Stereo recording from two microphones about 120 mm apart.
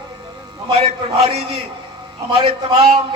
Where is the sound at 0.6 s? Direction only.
50° right (ahead or behind).